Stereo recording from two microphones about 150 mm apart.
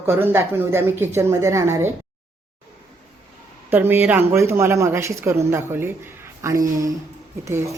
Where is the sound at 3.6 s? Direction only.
15° right (ahead or behind).